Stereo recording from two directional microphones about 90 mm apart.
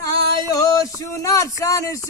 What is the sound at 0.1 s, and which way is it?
Speech, 40° left (ahead or behind).